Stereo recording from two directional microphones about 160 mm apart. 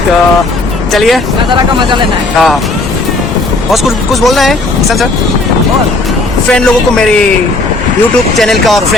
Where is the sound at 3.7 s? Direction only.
Centre (ahead or behind).